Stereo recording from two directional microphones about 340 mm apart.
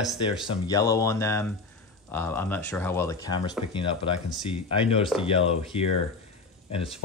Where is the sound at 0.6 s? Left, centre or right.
Centre.